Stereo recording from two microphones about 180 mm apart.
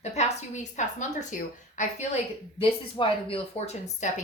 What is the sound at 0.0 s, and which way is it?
A woman's voice, 40° left (ahead or behind).